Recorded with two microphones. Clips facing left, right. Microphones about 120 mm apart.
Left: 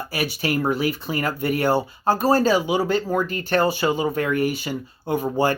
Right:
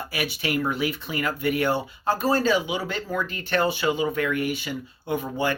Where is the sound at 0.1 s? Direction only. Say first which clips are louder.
Left 3 dB; 40° left (ahead or behind).